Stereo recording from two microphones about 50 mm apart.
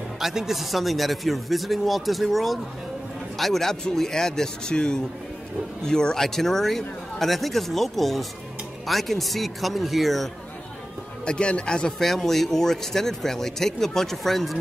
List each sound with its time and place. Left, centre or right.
0.2 s speech: centre
11.2 s speech: left
12.0 s speech: centre